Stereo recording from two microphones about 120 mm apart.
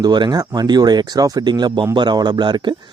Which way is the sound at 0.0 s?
35° right (ahead or behind).